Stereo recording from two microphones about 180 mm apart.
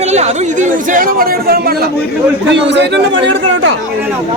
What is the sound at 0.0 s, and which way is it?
Speech, 40° right (ahead or behind).